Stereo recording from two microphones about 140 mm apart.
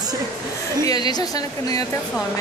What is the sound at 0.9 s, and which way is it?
Speech, 30° left (ahead or behind).